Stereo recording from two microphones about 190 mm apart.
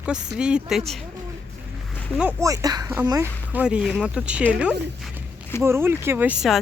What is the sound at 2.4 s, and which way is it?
Speech, 15° right (ahead or behind).